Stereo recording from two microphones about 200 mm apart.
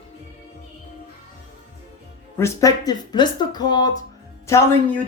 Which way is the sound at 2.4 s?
15° left (ahead or behind).